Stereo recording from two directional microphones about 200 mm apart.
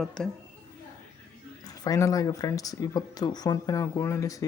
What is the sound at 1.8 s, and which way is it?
Speech, 15° left (ahead or behind).